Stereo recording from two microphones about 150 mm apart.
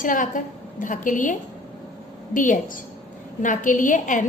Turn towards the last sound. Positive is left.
turn(degrees=60)  # may be behind; listen again after turning